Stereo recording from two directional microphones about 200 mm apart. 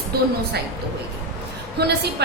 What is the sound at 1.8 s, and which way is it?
Speech, 55° right (ahead or behind).